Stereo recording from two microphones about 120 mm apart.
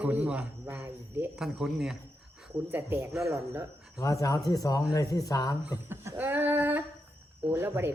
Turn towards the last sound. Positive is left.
turn(degrees=-20)  # may be behind; listen again after turning